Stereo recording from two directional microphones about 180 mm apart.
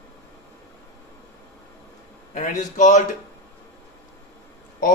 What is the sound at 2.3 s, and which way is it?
Speech, 45° left (ahead or behind).